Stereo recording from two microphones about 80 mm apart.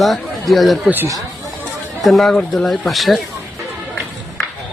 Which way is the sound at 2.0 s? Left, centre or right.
Centre.